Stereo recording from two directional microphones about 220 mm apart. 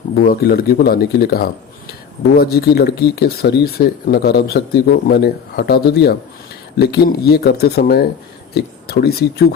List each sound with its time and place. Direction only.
0.2 s speech: 40° left (ahead or behind)